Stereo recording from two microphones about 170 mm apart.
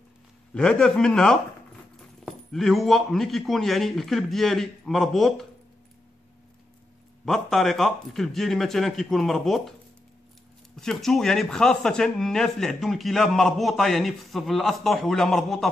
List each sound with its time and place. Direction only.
0.6 s speech: 5° left (ahead or behind)
7.2 s speech: centre (ahead or behind)
10.8 s speech: 5° left (ahead or behind)